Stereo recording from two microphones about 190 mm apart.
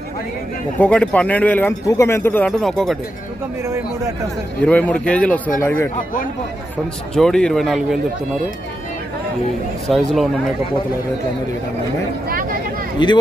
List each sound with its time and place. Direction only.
0.7 s a man's voice: 5° left (ahead or behind)
3.6 s speech: 15° right (ahead or behind)
4.6 s a man's voice: 5° left (ahead or behind)
7.2 s speech: 5° left (ahead or behind)
9.8 s speech: centre (ahead or behind)
13.0 s speech: 25° left (ahead or behind)